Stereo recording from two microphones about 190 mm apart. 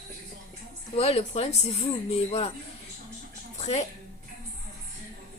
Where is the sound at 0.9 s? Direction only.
35° left (ahead or behind).